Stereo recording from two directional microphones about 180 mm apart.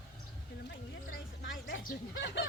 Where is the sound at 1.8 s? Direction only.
70° left (ahead or behind).